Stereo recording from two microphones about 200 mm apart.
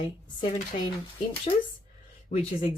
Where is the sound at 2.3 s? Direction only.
35° left (ahead or behind).